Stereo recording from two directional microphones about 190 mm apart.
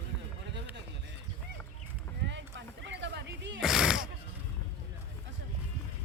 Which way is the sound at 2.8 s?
65° right (ahead or behind).